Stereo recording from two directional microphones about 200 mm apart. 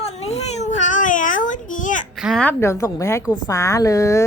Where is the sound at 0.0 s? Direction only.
30° left (ahead or behind).